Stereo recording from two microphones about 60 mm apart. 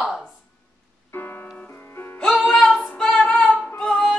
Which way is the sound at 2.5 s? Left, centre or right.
Centre.